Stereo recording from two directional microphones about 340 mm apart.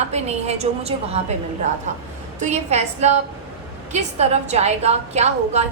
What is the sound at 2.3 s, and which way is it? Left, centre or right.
A woman's voice, centre.